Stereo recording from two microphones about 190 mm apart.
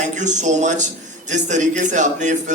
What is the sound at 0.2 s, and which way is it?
Speech, 40° right (ahead or behind).